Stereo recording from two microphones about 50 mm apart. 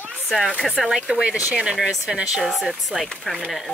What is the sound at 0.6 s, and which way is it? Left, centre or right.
Speech, centre.